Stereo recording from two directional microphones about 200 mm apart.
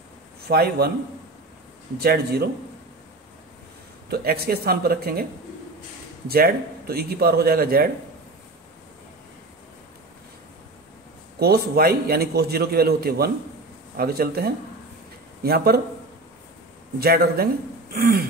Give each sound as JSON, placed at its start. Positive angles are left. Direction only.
{"t": 0.5, "sound": "a man's voice", "side_deg": -50}
{"t": 2.0, "sound": "a man's voice", "side_deg": -50}
{"t": 4.1, "sound": "a man's voice", "side_deg": -50}
{"t": 6.2, "sound": "a man's voice", "side_deg": -50}
{"t": 11.3, "sound": "a man's voice", "side_deg": -50}
{"t": 17.0, "sound": "a man's voice", "side_deg": -50}